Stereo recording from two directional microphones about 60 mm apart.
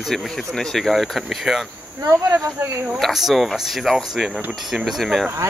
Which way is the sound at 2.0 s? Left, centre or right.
Right.